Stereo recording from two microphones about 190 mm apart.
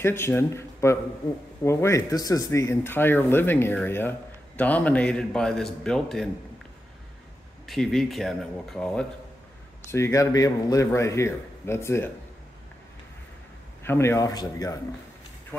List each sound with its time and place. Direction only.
0.0 s a man's voice: 10° left (ahead or behind)
7.6 s a man's voice: centre (ahead or behind)
9.8 s speech: 15° left (ahead or behind)
13.8 s speech: 15° left (ahead or behind)